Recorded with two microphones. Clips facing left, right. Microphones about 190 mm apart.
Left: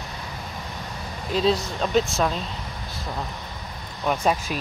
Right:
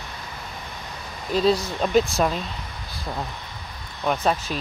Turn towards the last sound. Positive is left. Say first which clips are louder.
# even
turn(degrees=10)  # may be behind; listen again after turning